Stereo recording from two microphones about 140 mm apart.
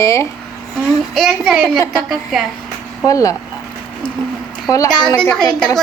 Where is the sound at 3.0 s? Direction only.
25° left (ahead or behind).